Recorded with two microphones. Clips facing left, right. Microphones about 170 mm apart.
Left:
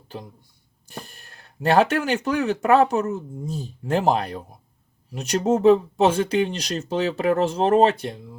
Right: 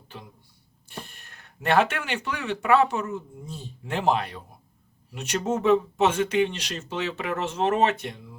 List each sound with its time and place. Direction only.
0.9 s speech: 40° left (ahead or behind)